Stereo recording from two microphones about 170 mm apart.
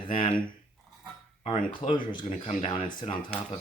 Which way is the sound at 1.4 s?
40° left (ahead or behind).